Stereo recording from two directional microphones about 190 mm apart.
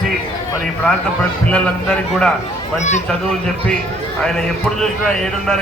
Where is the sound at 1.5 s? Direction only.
5° left (ahead or behind).